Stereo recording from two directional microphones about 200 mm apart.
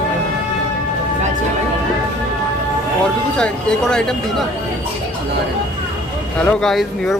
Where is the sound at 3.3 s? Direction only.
5° left (ahead or behind).